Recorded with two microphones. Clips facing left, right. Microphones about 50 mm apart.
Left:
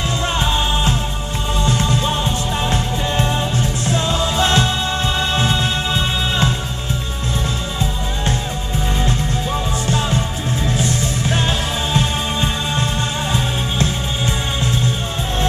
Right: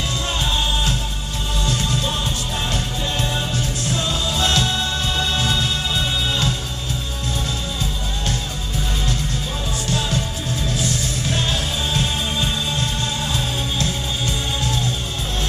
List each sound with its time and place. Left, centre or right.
1.6 s music: left
9.8 s music: left